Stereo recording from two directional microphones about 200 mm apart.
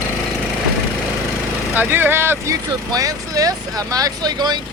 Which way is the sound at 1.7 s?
10° right (ahead or behind).